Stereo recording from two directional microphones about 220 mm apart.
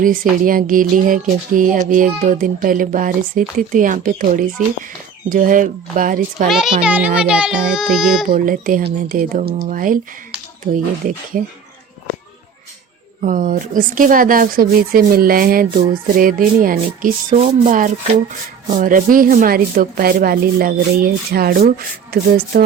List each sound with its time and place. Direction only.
0.0 s speech: 40° right (ahead or behind)
6.5 s a child's voice: centre (ahead or behind)
8.3 s speech: 40° right (ahead or behind)
13.2 s speech: 40° right (ahead or behind)